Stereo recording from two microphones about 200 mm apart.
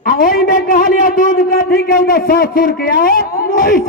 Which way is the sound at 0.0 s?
45° left (ahead or behind).